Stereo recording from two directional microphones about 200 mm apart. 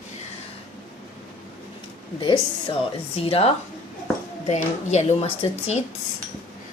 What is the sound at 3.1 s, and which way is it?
Speech, 30° left (ahead or behind).